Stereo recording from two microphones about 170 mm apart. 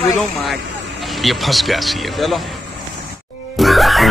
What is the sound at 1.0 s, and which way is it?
Speech, centre (ahead or behind).